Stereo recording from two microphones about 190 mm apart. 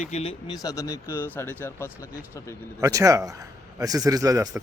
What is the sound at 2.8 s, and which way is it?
A man's voice, 15° right (ahead or behind).